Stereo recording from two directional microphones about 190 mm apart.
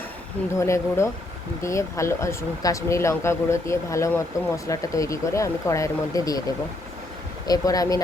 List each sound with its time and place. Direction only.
0.6 s speech: 15° left (ahead or behind)
7.4 s speech: 20° left (ahead or behind)